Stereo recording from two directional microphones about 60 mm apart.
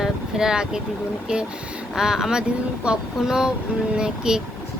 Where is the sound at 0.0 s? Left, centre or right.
Centre.